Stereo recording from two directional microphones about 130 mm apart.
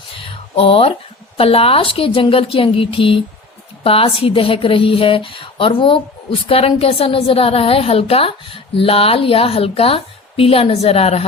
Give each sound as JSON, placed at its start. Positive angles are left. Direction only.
{"t": 0.5, "sound": "speech", "side_deg": 45}